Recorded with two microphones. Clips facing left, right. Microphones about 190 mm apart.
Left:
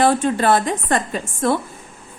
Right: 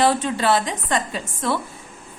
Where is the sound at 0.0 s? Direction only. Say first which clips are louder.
Left 3 dB; 50° left (ahead or behind).